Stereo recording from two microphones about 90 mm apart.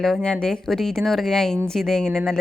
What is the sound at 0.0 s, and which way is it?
A woman's voice, 5° left (ahead or behind).